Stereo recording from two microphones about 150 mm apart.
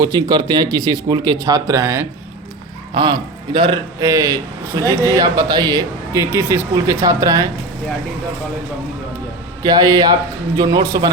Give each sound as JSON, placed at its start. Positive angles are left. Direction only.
{"t": 0.0, "sound": "speech", "side_deg": -25}
{"t": 2.9, "sound": "a man's voice", "side_deg": -30}
{"t": 4.0, "sound": "speech", "side_deg": -20}
{"t": 9.6, "sound": "speech", "side_deg": -25}